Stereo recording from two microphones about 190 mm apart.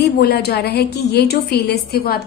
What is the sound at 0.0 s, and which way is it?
A woman's voice, 55° left (ahead or behind).